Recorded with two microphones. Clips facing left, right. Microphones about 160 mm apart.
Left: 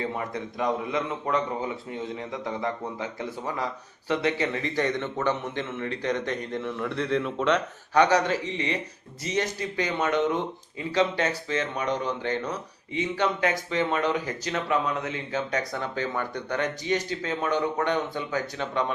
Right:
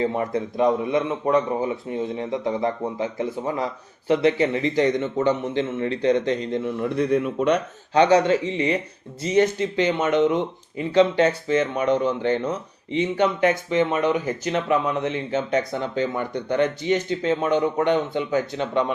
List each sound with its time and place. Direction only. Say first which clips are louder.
0.0 s speech: right 7 dB; 30° right (ahead or behind); by 7.6 s 15° right (ahead or behind)
7.9 s speech: right 5 dB; 25° right (ahead or behind)